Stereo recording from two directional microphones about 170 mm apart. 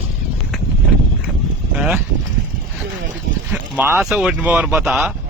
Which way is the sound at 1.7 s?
5° right (ahead or behind).